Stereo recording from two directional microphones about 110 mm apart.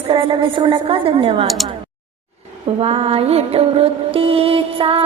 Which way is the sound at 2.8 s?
65° right (ahead or behind).